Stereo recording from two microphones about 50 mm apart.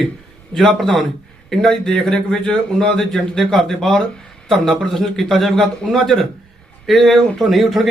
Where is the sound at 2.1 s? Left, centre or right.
Centre.